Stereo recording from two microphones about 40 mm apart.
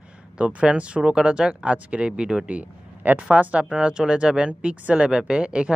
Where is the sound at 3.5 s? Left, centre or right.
Right.